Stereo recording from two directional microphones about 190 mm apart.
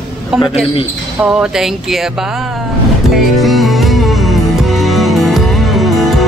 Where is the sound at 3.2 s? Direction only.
Centre (ahead or behind).